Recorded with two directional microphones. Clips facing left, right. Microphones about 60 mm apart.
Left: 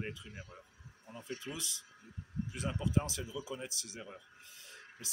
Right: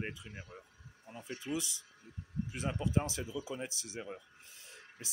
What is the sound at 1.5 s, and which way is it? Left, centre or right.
Speech, right.